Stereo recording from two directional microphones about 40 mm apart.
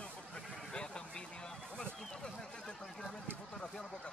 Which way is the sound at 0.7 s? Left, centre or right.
Left.